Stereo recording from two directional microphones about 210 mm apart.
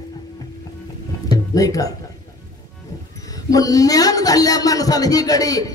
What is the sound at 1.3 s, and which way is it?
Music, 15° left (ahead or behind).